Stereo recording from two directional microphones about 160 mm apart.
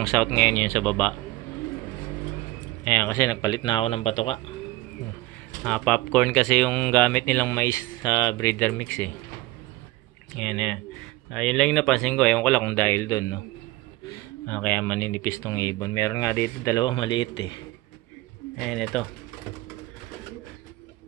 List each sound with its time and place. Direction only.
0.0 s speech: 5° left (ahead or behind)
2.8 s speech: 15° left (ahead or behind); by 4.4 s 35° left (ahead or behind)
5.6 s speech: 5° left (ahead or behind)
10.3 s speech: centre (ahead or behind); by 13.4 s 20° left (ahead or behind)
14.4 s speech: 10° left (ahead or behind); by 17.5 s 30° left (ahead or behind)
18.6 s speech: centre (ahead or behind)